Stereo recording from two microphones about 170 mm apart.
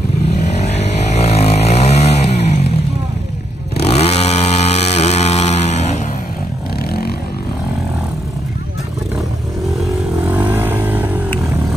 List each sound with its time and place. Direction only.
0.6 s vehicle: 40° left (ahead or behind)
3.7 s chainsaw: 35° left (ahead or behind)
10.2 s vehicle: 10° right (ahead or behind)